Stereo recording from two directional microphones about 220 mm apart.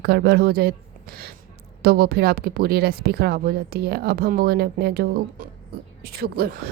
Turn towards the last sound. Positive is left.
turn(degrees=-45)  # may be behind; listen again after turning